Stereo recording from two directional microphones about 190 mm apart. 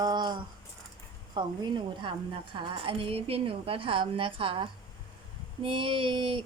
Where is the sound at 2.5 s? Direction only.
30° right (ahead or behind).